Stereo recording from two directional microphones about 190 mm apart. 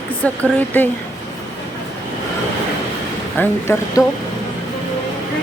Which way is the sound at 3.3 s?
15° left (ahead or behind).